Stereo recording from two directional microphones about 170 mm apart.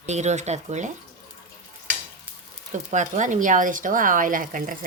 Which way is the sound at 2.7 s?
45° right (ahead or behind).